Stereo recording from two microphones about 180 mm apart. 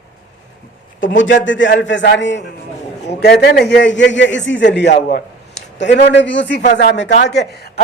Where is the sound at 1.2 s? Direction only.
90° left.